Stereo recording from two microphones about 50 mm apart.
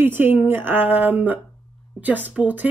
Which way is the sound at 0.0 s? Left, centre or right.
Right.